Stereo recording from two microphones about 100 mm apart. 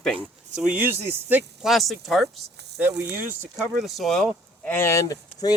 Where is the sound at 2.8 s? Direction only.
20° right (ahead or behind).